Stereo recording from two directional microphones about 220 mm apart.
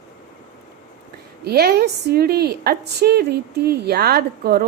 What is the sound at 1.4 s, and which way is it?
A woman's voice, 45° right (ahead or behind).